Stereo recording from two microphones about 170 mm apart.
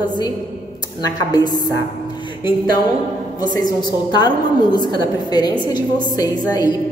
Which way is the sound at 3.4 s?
25° left (ahead or behind).